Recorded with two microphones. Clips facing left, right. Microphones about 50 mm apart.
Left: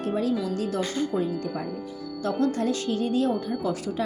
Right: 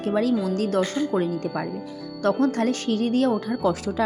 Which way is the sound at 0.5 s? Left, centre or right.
Right.